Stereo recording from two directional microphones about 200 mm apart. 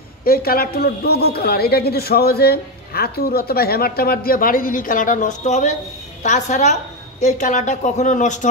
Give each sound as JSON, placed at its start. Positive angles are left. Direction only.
{"t": 0.2, "sound": "a man's voice", "side_deg": 50}